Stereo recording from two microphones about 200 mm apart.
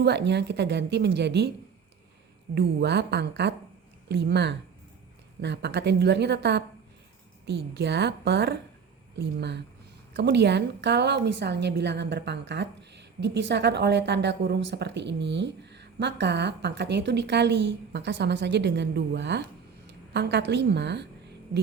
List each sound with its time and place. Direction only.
0.0 s a woman's voice: 60° right (ahead or behind)
2.6 s a woman's voice: 55° right (ahead or behind)